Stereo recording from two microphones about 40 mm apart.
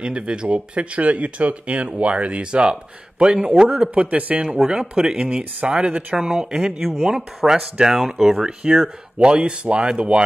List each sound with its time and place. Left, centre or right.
0.0 s speech: right
3.8 s speech: right
4.6 s speech: centre
5.8 s speech: right
6.1 s speech: centre